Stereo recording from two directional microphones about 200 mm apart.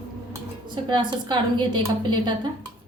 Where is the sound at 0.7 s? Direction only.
25° right (ahead or behind).